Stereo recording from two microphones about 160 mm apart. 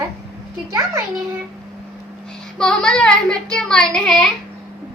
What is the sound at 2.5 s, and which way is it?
Speech, 5° left (ahead or behind).